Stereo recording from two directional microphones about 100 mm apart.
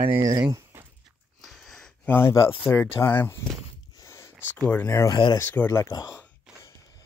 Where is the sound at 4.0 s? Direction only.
30° left (ahead or behind).